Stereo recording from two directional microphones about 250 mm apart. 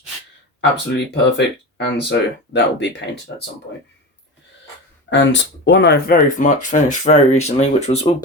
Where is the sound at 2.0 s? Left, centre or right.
Left.